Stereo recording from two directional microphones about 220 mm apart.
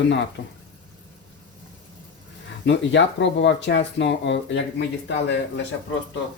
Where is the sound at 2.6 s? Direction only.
55° left (ahead or behind).